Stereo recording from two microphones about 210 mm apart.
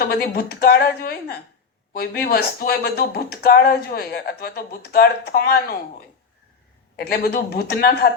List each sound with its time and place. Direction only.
0.0 s speech: 45° left (ahead or behind)
6.9 s speech: 50° left (ahead or behind)